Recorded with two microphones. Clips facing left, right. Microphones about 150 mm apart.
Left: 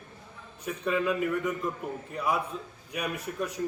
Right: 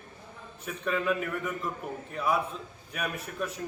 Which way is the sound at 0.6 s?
15° left (ahead or behind).